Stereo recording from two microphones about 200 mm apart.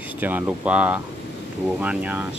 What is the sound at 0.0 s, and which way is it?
Speech, 10° right (ahead or behind).